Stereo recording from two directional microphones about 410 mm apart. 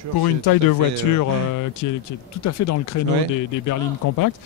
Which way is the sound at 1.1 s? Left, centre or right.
Left.